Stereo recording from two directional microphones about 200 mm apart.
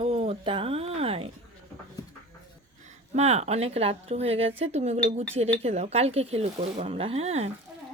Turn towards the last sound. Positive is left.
turn(degrees=-30)  # may be behind; listen again after turning